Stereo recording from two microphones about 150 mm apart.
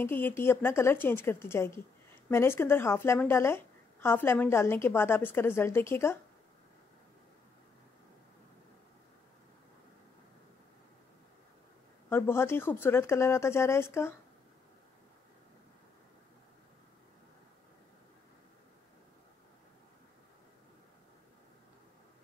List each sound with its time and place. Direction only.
0.0 s a woman's voice: 15° left (ahead or behind)
12.1 s a woman's voice: 15° left (ahead or behind)